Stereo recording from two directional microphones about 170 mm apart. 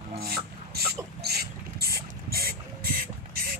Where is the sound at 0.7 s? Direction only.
70° right (ahead or behind).